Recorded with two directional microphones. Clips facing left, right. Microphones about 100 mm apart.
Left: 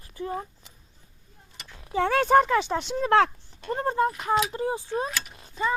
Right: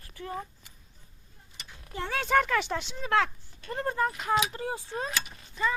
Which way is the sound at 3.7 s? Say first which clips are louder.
Left 5 dB; 25° left (ahead or behind).